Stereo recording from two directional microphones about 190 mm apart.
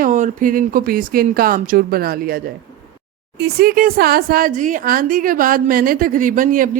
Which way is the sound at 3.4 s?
50° right (ahead or behind).